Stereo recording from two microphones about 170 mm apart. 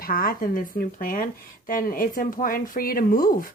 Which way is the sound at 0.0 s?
55° left (ahead or behind).